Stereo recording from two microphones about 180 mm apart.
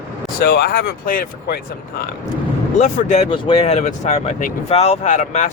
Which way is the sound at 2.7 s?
40° left (ahead or behind).